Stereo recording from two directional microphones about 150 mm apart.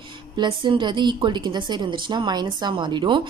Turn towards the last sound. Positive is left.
turn(degrees=-30)  # may be behind; listen again after turning